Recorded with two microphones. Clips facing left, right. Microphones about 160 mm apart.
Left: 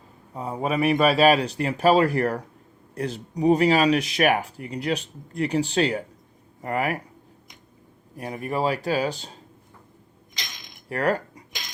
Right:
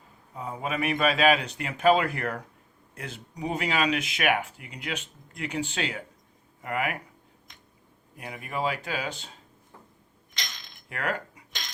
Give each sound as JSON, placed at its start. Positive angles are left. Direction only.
{"t": 0.3, "sound": "speech", "side_deg": 35}
{"t": 8.1, "sound": "speech", "side_deg": 40}
{"t": 10.3, "sound": "mechanisms", "side_deg": 10}
{"t": 10.8, "sound": "cutlery", "side_deg": 35}